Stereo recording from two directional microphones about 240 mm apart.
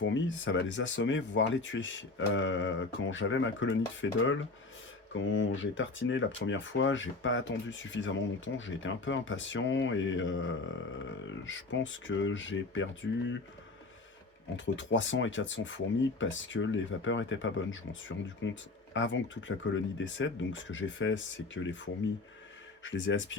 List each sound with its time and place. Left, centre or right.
0.0 s speech: left
14.5 s speech: left
22.8 s speech: left